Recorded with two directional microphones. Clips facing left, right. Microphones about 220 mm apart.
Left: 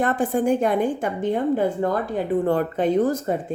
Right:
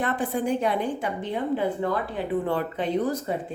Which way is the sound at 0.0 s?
45° left (ahead or behind).